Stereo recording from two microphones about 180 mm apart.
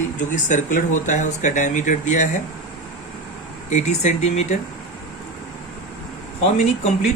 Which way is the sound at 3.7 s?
40° left (ahead or behind).